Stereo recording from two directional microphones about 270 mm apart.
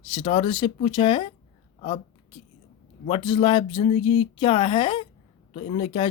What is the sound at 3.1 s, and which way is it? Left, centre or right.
Speech, centre.